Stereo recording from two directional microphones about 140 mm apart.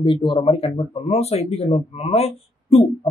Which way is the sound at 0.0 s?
35° left (ahead or behind).